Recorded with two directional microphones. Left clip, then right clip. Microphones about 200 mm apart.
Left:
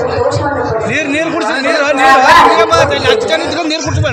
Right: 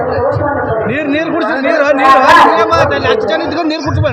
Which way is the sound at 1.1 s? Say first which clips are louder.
Even; 25° right (ahead or behind).